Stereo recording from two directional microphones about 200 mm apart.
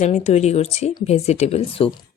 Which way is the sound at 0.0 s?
35° left (ahead or behind).